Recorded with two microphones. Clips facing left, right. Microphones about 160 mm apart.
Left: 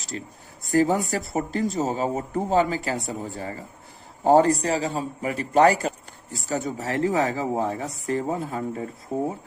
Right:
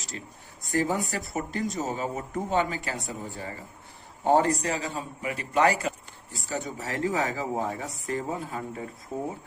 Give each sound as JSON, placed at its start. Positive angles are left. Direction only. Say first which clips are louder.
{"t": 0.1, "sound": "speech", "louder": "left 7 dB", "side_deg": 35}